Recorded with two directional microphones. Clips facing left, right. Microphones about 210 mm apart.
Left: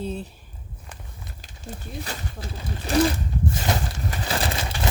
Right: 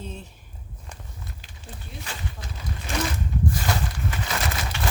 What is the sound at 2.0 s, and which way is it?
Speech, 35° left (ahead or behind).